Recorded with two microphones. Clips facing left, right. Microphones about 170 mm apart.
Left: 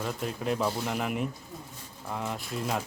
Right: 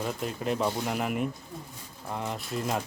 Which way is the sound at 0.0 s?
Centre (ahead or behind).